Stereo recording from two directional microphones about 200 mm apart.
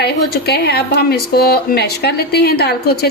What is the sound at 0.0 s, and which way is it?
Speech, 55° left (ahead or behind).